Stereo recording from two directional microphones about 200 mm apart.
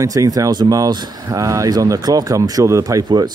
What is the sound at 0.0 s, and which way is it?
Speech, 15° right (ahead or behind).